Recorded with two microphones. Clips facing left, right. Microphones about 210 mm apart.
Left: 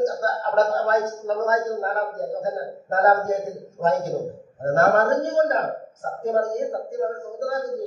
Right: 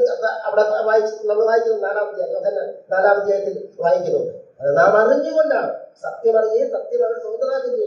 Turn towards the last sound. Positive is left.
turn(degrees=-50)  # may be behind; listen again after turning